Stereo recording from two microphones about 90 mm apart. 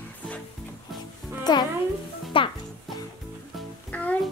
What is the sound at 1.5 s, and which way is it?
Speech, 50° left (ahead or behind).